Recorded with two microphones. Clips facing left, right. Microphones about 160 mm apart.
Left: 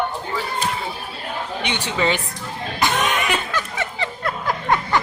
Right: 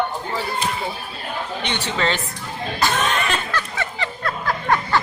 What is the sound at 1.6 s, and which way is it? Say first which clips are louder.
Speech: left 2 dB; 10° left (ahead or behind).